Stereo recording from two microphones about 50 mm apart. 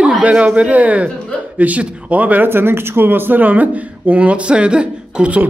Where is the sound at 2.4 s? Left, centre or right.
Right.